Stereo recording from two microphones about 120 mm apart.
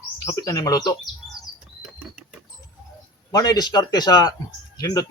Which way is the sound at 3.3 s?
30° left (ahead or behind).